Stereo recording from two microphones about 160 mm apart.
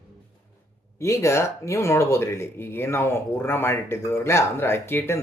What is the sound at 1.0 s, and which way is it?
Speech, 20° left (ahead or behind).